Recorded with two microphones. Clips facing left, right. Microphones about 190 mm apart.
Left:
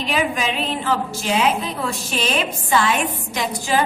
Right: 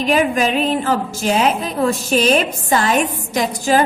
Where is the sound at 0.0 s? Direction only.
45° right (ahead or behind).